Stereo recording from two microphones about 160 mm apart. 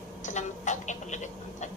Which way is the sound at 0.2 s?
50° left (ahead or behind).